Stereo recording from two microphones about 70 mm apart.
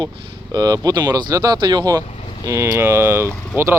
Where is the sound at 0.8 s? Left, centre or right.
Right.